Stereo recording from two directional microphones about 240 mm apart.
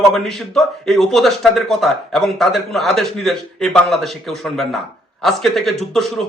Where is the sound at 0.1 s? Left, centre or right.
Centre.